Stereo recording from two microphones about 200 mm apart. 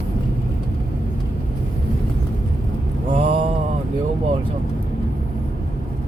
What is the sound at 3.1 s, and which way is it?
Mantra, 30° right (ahead or behind).